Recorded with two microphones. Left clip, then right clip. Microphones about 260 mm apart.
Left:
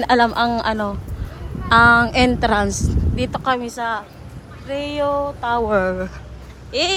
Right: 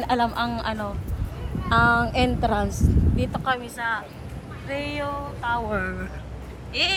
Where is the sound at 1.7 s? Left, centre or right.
Left.